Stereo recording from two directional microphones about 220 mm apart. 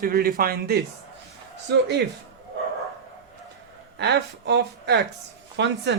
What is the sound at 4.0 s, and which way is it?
Speech, 50° right (ahead or behind).